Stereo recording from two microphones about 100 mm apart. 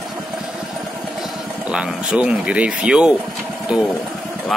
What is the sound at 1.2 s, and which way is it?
Speech, 10° right (ahead or behind).